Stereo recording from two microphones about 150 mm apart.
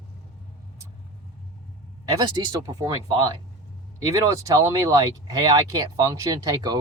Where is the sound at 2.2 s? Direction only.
25° right (ahead or behind).